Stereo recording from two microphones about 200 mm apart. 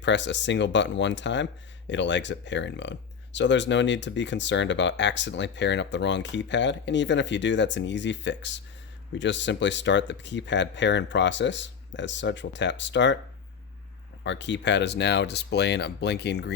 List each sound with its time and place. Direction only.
0.0 s speech: 65° left (ahead or behind)
14.3 s speech: 60° left (ahead or behind)